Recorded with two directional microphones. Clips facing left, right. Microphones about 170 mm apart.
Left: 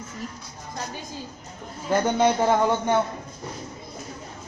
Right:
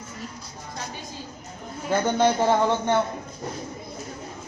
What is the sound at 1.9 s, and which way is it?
A man's voice, 10° left (ahead or behind).